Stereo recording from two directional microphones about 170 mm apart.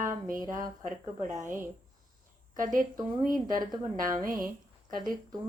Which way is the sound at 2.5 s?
50° right (ahead or behind).